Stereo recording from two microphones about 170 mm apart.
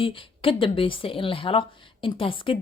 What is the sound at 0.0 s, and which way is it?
Speech, 30° left (ahead or behind).